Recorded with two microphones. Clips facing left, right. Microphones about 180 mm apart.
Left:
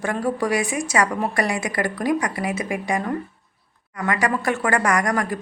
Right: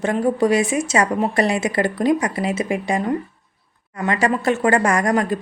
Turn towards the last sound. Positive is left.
turn(degrees=-25)  # may be behind; listen again after turning